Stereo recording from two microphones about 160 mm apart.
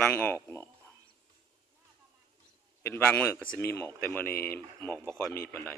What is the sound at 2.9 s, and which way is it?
Speech, 15° left (ahead or behind).